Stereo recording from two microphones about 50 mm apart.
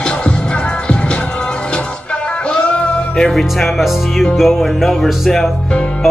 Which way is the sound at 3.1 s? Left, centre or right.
Centre.